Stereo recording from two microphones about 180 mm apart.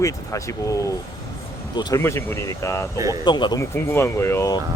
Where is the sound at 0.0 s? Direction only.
15° left (ahead or behind).